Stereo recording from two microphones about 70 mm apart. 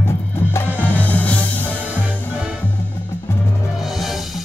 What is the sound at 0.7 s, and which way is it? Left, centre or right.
Music, right.